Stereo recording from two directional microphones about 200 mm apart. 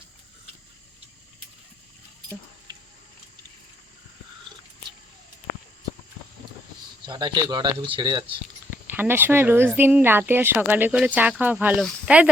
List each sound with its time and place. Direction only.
7.0 s speech: 25° right (ahead or behind)
9.0 s speech: 10° right (ahead or behind)